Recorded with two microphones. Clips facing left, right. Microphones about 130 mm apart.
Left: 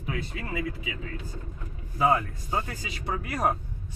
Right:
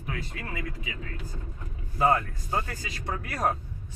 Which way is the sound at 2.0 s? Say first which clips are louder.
Even; 10° left (ahead or behind).